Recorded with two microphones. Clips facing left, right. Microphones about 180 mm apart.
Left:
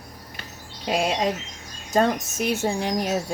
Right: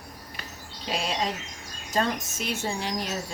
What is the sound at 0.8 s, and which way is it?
Speech, 55° left (ahead or behind).